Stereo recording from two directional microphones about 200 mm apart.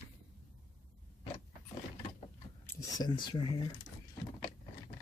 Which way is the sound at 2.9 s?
20° left (ahead or behind).